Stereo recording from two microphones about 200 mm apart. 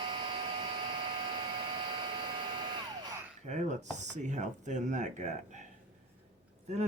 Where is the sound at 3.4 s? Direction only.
35° right (ahead or behind).